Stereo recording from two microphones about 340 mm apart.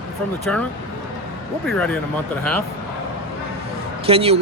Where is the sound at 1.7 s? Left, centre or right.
Centre.